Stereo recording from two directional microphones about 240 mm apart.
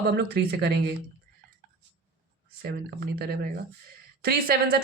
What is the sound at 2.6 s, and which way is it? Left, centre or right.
Speech, right.